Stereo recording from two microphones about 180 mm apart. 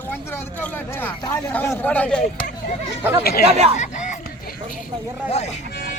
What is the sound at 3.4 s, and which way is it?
Speech, 35° right (ahead or behind).